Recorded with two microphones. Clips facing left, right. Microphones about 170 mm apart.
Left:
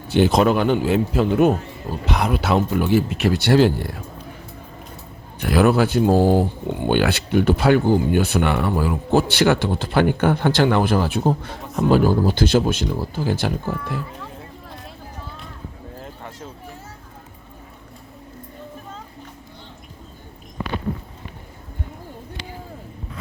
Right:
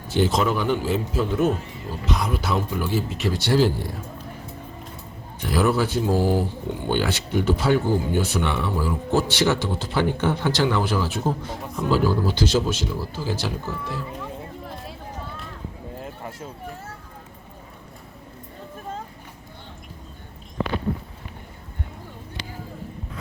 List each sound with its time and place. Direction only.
0.1 s speech: 60° left (ahead or behind)
5.4 s speech: 65° left (ahead or behind)
6.8 s speech: 65° left (ahead or behind)